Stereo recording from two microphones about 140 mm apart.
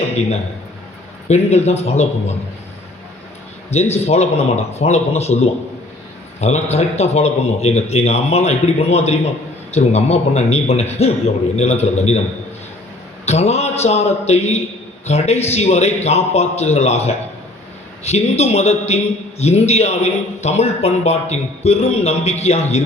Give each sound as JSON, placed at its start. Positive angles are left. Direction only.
{"t": 1.3, "sound": "a man's voice", "side_deg": 50}
{"t": 3.7, "sound": "a man's voice", "side_deg": 50}
{"t": 13.2, "sound": "a man's voice", "side_deg": 50}